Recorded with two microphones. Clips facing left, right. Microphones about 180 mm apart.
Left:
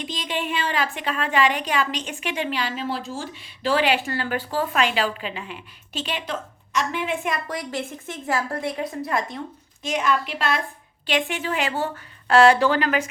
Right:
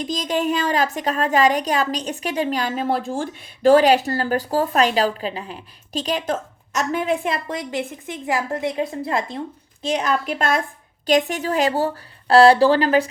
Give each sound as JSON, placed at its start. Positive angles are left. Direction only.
{"t": 0.0, "sound": "a woman's voice", "side_deg": -40}